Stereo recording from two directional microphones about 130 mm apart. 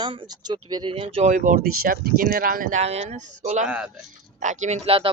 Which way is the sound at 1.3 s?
90° right.